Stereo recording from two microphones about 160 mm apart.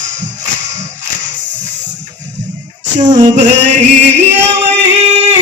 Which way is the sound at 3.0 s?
50° right (ahead or behind).